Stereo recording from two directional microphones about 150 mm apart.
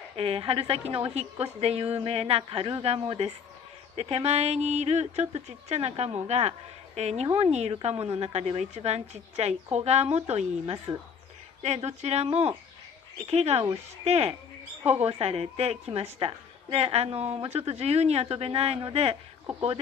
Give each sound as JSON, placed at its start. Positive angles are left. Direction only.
{"t": 0.1, "sound": "a woman's voice", "side_deg": -40}